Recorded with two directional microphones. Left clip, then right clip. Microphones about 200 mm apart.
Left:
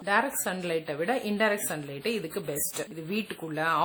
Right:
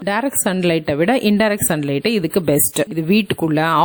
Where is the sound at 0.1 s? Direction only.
45° right (ahead or behind).